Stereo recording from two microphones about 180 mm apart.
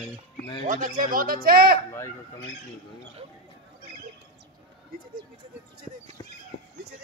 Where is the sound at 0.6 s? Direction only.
45° right (ahead or behind).